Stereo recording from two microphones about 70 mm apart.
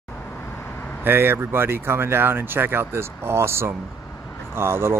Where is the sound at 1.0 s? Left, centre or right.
Right.